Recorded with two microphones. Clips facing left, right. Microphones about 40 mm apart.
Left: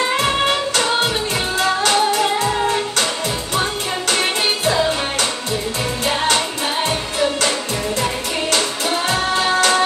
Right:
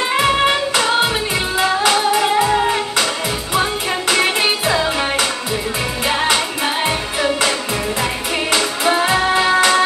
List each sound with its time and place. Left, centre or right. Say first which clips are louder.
0.1 s music: right 3 dB; centre
4.1 s music: right 3 dB; right
6.0 s music: right 1 dB; centre